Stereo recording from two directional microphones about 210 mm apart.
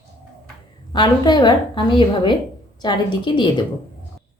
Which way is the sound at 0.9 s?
20° left (ahead or behind).